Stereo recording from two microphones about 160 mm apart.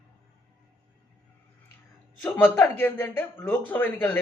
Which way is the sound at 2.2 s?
15° left (ahead or behind).